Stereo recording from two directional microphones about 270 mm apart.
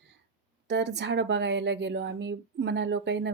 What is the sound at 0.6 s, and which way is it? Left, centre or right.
A woman's voice, right.